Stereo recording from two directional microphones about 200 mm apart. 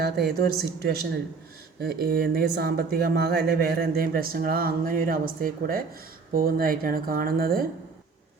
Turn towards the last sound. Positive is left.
turn(degrees=-45)  # may be behind; listen again after turning